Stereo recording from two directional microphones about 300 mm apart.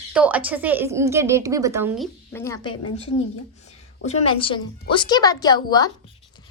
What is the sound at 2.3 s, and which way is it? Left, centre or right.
A woman's voice, centre.